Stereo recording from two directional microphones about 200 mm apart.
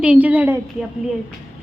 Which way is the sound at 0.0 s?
5° right (ahead or behind).